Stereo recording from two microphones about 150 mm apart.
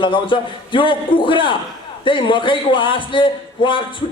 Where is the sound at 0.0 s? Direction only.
35° left (ahead or behind).